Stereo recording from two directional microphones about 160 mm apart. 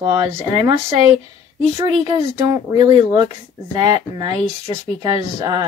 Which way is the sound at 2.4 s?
25° right (ahead or behind).